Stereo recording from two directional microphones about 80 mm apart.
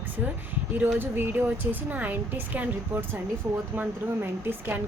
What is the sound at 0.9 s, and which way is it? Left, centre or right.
Speech, right.